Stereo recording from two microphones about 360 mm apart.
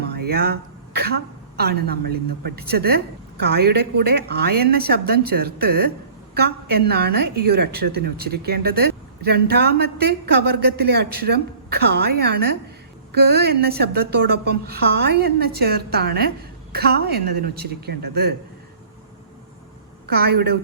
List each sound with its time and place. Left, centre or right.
0.3 s a woman's voice: right
20.1 s a woman's voice: right